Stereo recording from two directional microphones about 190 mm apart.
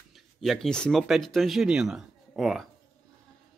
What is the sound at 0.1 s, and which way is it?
Speech, centre (ahead or behind).